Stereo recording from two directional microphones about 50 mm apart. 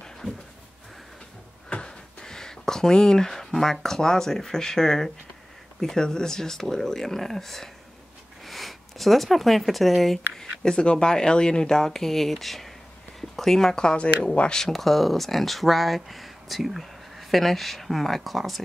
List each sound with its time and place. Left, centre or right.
1.7 s speech: centre
10.3 s speech: centre
14.6 s speech: centre